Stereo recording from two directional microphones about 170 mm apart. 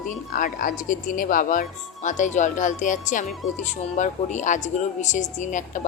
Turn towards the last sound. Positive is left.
turn(degrees=45)  # may be behind; listen again after turning